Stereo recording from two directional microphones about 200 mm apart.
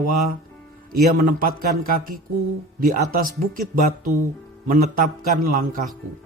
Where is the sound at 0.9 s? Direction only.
45° right (ahead or behind).